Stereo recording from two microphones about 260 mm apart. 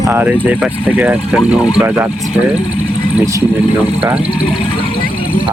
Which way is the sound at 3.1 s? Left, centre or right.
Centre.